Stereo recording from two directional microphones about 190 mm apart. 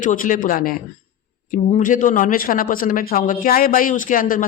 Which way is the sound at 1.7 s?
45° left (ahead or behind).